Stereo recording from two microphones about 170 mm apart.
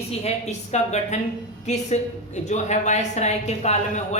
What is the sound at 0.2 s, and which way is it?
A woman's voice, 40° left (ahead or behind).